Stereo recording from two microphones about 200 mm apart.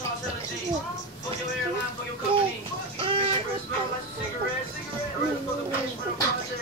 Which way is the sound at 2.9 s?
25° right (ahead or behind).